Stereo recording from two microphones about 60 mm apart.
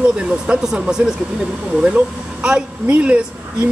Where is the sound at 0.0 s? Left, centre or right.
Centre.